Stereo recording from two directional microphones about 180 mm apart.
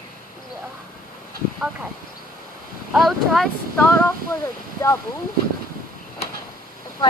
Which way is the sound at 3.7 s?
15° left (ahead or behind).